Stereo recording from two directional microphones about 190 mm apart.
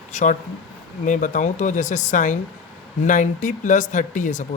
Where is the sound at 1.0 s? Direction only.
40° left (ahead or behind).